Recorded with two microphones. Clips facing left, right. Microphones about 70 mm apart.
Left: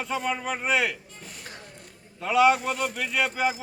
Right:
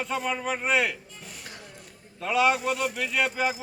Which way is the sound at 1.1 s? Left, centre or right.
Left.